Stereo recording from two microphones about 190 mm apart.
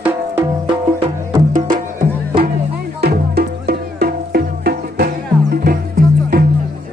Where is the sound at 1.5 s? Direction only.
45° right (ahead or behind).